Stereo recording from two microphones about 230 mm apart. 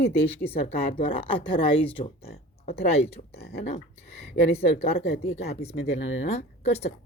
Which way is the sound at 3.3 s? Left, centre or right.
Left.